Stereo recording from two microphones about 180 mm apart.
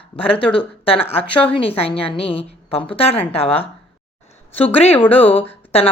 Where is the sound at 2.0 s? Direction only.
30° left (ahead or behind).